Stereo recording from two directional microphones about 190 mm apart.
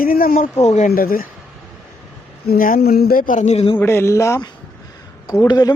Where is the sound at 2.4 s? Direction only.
50° left (ahead or behind); by 3.8 s 30° left (ahead or behind).